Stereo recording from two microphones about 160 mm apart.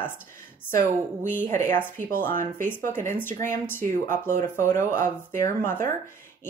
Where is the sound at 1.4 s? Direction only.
15° left (ahead or behind).